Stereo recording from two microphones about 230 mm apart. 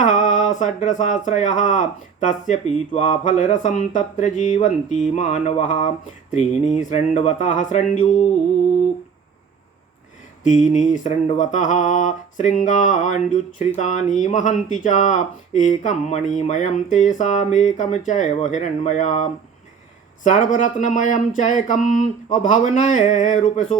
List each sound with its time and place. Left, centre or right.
0.0 s speech: left
10.4 s speech: left